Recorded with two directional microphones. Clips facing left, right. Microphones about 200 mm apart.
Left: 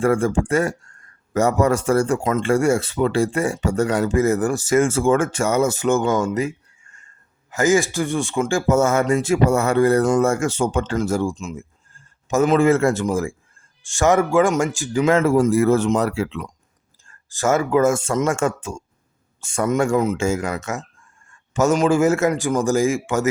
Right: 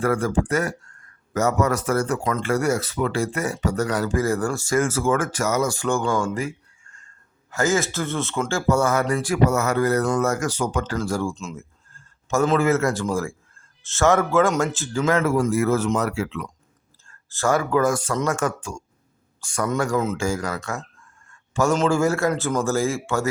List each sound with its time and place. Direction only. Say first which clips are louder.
0.0 s speech: left 3 dB; 25° left (ahead or behind)
7.5 s speech: left 4 dB; 15° left (ahead or behind)
17.1 s a man's voice: left 2 dB; 15° left (ahead or behind)